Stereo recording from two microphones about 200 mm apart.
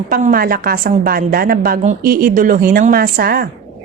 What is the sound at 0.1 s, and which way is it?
A woman's voice, 45° right (ahead or behind).